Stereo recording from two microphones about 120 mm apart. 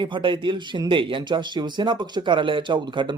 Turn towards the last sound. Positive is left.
turn(degrees=-40)  # may be behind; listen again after turning